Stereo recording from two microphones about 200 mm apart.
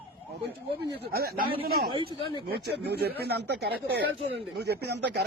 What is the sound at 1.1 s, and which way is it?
Speech, 50° right (ahead or behind).